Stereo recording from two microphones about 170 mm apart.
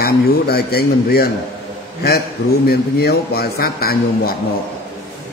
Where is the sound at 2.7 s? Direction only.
65° left (ahead or behind).